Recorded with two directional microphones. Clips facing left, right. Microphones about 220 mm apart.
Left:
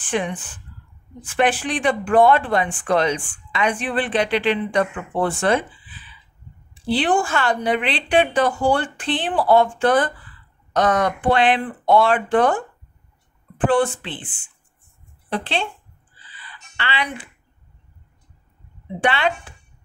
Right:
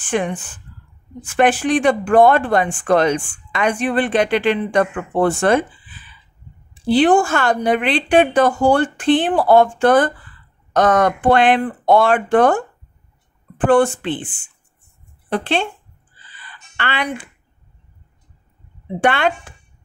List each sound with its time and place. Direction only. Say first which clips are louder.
0.0 s speech: right 3 dB; 50° right (ahead or behind)
6.9 s speech: right 6 dB; 45° right (ahead or behind)
13.7 s speech: right 5 dB; 45° right (ahead or behind)
15.2 s speech: right 5 dB; 50° right (ahead or behind)
16.3 s a sound: right 4 dB; 50° right (ahead or behind)
18.9 s speech: right 4 dB; 50° right (ahead or behind)